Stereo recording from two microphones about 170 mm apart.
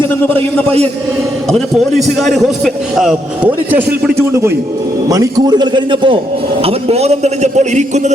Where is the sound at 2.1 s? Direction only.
Centre (ahead or behind).